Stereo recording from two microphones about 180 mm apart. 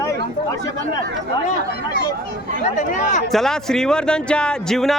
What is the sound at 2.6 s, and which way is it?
Speech, 45° left (ahead or behind).